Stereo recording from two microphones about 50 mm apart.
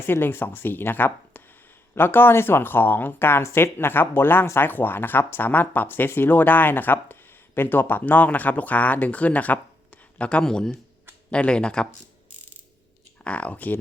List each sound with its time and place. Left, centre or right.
0.0 s speech: left
10.4 s speech: centre
11.3 s speech: left
13.2 s speech: left